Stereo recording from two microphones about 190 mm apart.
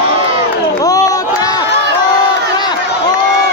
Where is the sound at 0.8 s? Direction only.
20° left (ahead or behind).